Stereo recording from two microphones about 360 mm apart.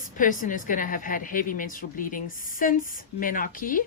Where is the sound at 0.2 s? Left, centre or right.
Left.